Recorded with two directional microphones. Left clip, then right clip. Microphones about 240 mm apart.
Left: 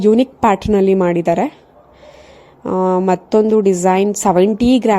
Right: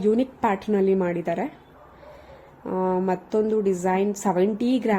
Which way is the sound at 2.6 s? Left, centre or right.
Left.